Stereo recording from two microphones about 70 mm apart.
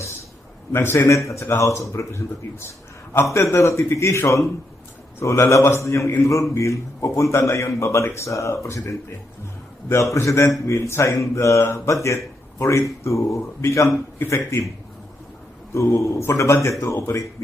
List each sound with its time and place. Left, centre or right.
0.7 s a man's voice: left
15.7 s speech: left